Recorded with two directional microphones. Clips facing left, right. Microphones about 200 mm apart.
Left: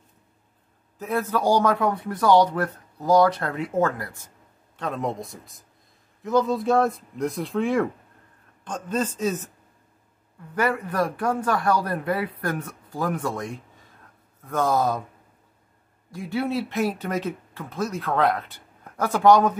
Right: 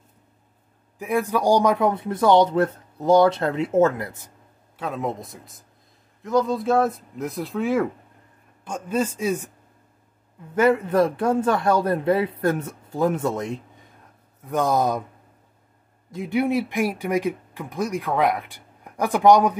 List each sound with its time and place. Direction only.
0.9 s a man's voice: 15° right (ahead or behind)
4.7 s speech: 5° right (ahead or behind)
10.5 s a man's voice: 20° right (ahead or behind)
16.1 s speech: 20° right (ahead or behind)